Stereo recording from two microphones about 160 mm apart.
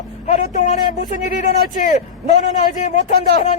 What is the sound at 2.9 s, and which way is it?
Speech, 50° left (ahead or behind).